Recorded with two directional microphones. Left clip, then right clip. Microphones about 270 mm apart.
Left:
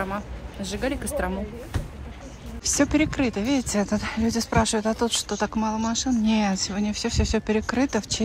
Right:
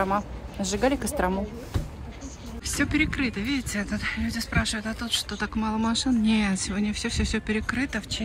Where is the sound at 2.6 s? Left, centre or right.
Centre.